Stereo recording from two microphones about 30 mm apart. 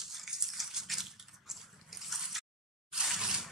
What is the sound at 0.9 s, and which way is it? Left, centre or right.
Crushing, centre.